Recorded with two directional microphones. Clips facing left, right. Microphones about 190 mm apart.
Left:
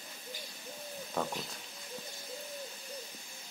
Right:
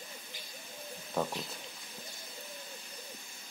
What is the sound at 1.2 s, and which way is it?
Speech, 5° right (ahead or behind).